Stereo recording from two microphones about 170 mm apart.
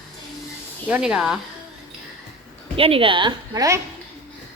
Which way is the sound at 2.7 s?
35° right (ahead or behind).